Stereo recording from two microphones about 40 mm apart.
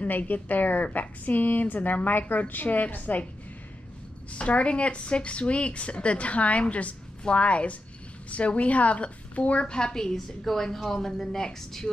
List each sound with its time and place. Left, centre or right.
0.0 s a woman's voice: left
4.3 s a woman's voice: left; by 11.9 s centre